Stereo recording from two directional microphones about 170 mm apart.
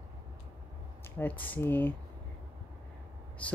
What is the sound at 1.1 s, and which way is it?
Speech, 10° left (ahead or behind).